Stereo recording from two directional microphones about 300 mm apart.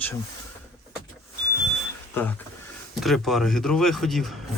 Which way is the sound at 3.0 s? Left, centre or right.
Centre.